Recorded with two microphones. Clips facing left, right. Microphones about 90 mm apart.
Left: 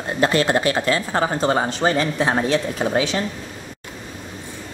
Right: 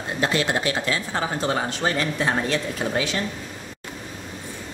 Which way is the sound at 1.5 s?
30° left (ahead or behind).